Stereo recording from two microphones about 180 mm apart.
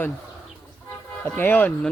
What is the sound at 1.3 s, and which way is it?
Speech, 10° left (ahead or behind).